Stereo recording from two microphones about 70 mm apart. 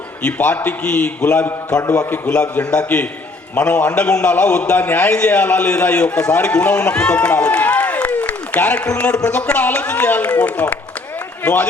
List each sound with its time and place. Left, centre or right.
0.2 s a man's voice: left